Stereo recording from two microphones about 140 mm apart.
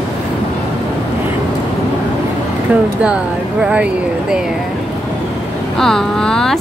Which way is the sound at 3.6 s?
10° right (ahead or behind).